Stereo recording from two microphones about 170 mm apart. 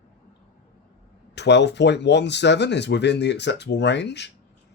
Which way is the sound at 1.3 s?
90° left.